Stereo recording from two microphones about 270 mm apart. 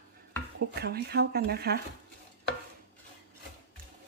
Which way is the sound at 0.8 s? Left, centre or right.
Right.